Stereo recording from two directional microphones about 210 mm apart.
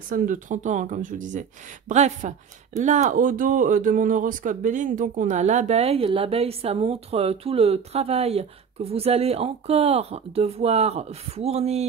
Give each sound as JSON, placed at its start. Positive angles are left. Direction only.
{"t": 0.1, "sound": "speech", "side_deg": -40}